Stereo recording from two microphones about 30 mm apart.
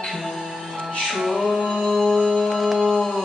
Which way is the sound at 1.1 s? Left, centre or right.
Centre.